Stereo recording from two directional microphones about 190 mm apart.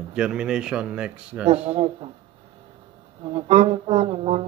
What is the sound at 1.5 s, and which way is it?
Speech, 35° right (ahead or behind).